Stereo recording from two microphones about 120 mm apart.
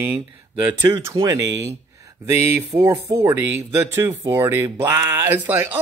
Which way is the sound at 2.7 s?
35° right (ahead or behind).